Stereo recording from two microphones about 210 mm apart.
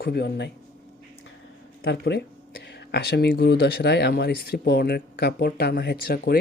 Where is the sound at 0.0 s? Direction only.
50° left (ahead or behind).